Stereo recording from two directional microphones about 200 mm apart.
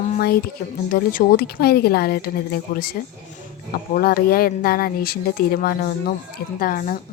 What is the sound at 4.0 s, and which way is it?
A woman's voice, 50° left (ahead or behind).